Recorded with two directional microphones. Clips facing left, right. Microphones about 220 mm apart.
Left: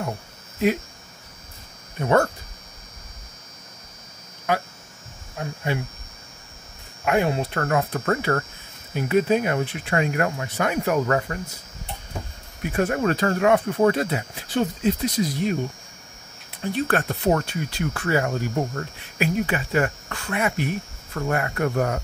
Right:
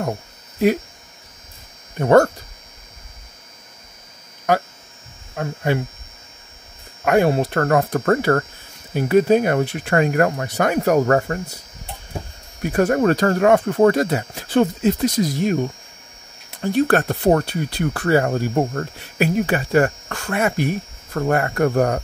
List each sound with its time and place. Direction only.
2.0 s speech: 50° right (ahead or behind)
5.3 s speech: 50° right (ahead or behind)
7.1 s speech: 45° right (ahead or behind)
8.9 s speech: 35° right (ahead or behind)
9.6 s speech: 50° right (ahead or behind)
16.6 s speech: 40° right (ahead or behind)
17.6 s speech: 65° right (ahead or behind)
17.9 s speech: 35° right (ahead or behind)
18.5 s speech: 50° right (ahead or behind)